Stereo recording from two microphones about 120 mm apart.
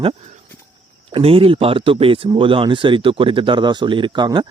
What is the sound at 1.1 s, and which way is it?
Speech, 50° right (ahead or behind).